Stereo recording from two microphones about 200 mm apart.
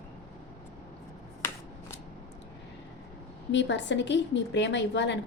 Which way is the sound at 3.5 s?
65° left (ahead or behind).